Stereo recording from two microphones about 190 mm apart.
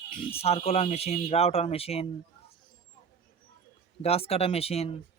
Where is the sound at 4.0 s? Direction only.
30° left (ahead or behind).